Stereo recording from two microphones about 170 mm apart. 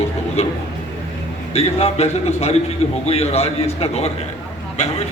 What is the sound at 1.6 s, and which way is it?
Speech, 40° left (ahead or behind).